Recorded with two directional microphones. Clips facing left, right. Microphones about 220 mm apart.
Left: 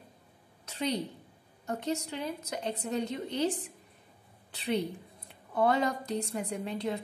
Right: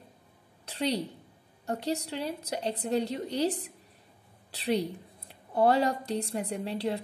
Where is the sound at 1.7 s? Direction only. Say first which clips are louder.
Right 2 dB; 35° right (ahead or behind).